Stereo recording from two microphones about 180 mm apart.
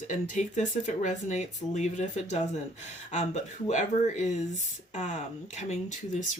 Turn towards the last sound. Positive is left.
turn(degrees=40)  # may be behind; listen again after turning